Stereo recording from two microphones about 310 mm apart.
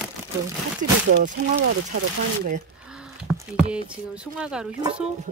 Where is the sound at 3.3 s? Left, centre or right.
Centre.